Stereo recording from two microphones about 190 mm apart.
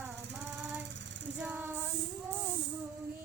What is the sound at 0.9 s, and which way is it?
Jackhammer, 70° right (ahead or behind).